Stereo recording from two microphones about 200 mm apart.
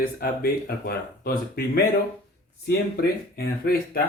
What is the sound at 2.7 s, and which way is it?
Speech, 50° left (ahead or behind).